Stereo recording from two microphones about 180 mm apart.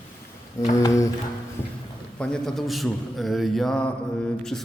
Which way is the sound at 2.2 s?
5° left (ahead or behind).